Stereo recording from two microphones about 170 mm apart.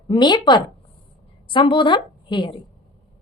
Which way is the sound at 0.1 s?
25° left (ahead or behind).